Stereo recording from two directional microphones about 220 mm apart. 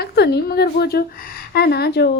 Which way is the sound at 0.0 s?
50° left (ahead or behind).